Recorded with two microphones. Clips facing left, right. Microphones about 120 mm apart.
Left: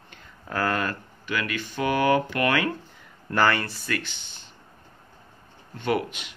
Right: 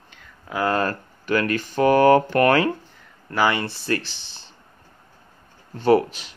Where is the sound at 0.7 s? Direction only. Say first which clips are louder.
Right 5 dB; 40° right (ahead or behind).